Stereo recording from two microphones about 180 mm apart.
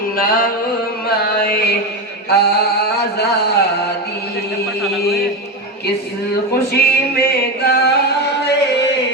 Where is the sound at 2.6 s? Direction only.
65° left (ahead or behind).